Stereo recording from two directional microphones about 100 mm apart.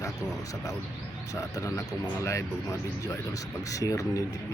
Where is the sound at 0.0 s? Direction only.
35° left (ahead or behind).